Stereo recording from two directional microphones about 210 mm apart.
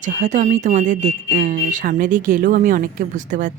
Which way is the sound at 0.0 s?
35° right (ahead or behind).